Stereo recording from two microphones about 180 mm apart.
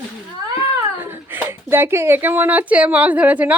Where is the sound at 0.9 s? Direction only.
10° right (ahead or behind).